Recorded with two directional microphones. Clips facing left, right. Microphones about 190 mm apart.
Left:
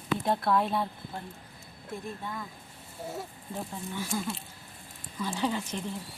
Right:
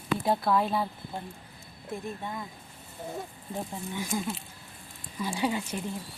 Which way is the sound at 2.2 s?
20° right (ahead or behind).